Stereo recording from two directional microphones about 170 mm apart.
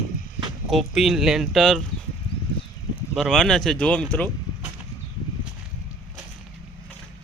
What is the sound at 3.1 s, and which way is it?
Speech, centre (ahead or behind).